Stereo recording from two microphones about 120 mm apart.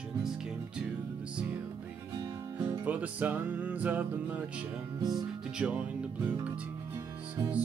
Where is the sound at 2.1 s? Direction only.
30° right (ahead or behind).